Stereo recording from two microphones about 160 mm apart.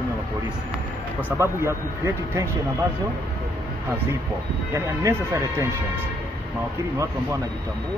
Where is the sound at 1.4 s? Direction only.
15° right (ahead or behind).